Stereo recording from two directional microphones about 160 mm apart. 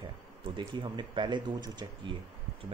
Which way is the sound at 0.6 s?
30° right (ahead or behind).